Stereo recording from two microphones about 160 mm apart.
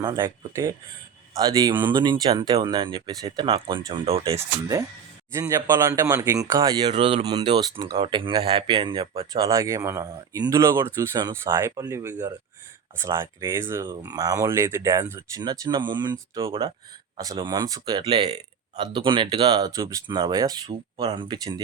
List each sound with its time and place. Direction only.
0.0 s speech: 25° right (ahead or behind)
5.3 s speech: 20° right (ahead or behind)